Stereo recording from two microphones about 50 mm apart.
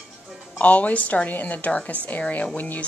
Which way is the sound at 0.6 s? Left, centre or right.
Left.